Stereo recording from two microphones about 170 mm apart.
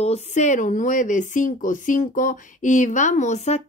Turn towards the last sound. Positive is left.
turn(degrees=40)  # may be behind; listen again after turning